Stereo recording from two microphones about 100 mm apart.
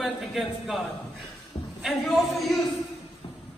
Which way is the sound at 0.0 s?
Centre (ahead or behind).